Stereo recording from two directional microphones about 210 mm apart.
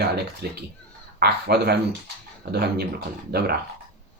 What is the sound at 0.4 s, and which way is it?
Speech, 50° right (ahead or behind).